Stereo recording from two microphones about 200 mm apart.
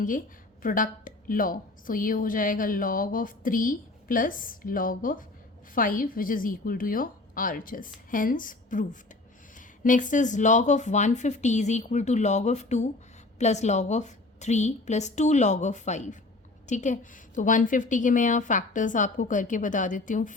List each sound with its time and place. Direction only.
0.6 s a woman's voice: 45° left (ahead or behind)